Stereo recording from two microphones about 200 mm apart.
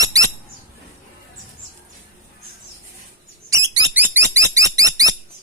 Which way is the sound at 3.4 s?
15° right (ahead or behind).